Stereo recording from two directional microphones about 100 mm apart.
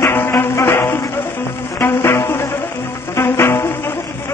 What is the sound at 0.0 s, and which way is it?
Music, 20° left (ahead or behind).